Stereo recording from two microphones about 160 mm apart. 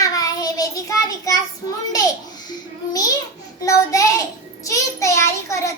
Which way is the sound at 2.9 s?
20° left (ahead or behind).